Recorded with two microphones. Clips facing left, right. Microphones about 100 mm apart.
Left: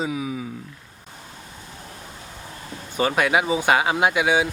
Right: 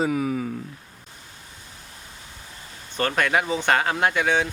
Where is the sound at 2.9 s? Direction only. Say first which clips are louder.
Left 2 dB; 10° left (ahead or behind).